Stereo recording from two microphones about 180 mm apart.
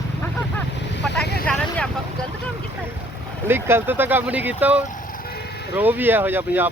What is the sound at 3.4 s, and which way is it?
Speech, 15° right (ahead or behind).